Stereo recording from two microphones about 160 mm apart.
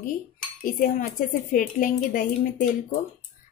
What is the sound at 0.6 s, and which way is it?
A woman's voice, 60° left (ahead or behind).